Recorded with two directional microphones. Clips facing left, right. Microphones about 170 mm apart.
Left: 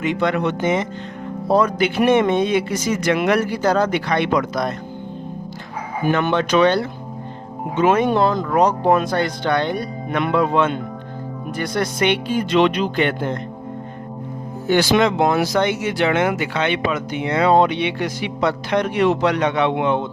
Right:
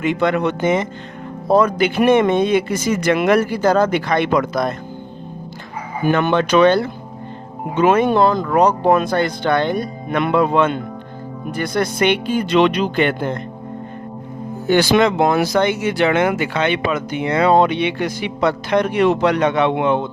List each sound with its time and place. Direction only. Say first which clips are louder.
0.0 s speech: right 2 dB; 50° right (ahead or behind)
6.1 s speech: right 3 dB; 55° right (ahead or behind)
14.7 s speech: right 2 dB; 55° right (ahead or behind)